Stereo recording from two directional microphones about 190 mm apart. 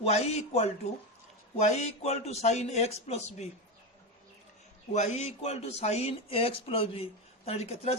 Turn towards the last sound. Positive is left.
turn(degrees=35)  # may be behind; listen again after turning